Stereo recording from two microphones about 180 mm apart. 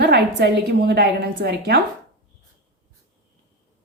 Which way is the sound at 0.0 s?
65° right (ahead or behind).